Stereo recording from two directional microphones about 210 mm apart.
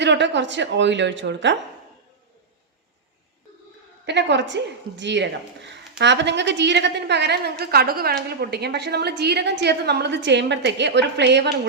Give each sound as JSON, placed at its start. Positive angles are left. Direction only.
{"t": 0.0, "sound": "a woman's voice", "side_deg": -55}
{"t": 4.0, "sound": "a woman's voice", "side_deg": -55}